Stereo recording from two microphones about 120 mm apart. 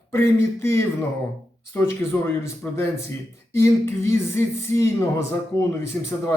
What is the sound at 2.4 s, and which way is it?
A man's voice, 25° left (ahead or behind).